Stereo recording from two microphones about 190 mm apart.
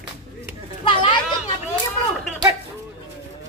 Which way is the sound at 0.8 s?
25° left (ahead or behind).